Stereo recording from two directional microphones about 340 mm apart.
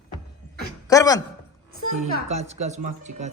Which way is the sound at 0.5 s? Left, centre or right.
Centre.